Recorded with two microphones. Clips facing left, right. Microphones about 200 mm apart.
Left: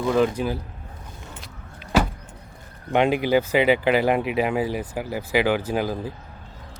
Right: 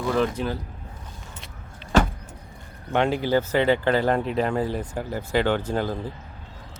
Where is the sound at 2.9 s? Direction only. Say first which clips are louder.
Left 2 dB; 15° left (ahead or behind).